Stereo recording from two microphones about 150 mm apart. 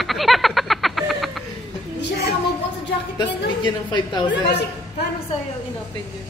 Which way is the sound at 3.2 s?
30° left (ahead or behind).